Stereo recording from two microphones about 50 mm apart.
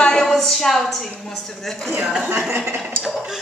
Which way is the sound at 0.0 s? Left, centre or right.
Centre.